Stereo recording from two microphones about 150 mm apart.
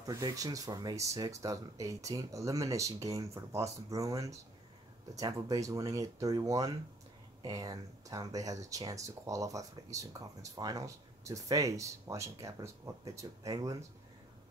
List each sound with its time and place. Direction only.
0.0 s speech: 25° right (ahead or behind)